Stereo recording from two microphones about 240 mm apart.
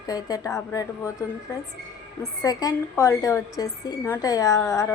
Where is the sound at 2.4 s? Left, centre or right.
Centre.